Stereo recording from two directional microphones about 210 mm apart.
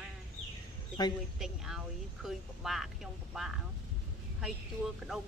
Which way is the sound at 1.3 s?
Centre (ahead or behind).